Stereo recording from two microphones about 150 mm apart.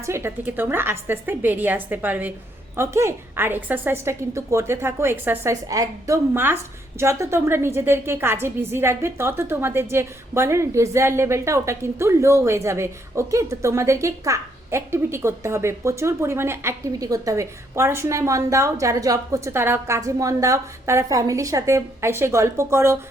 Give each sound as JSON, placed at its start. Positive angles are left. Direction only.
{"t": 0.0, "sound": "a woman's voice", "side_deg": -15}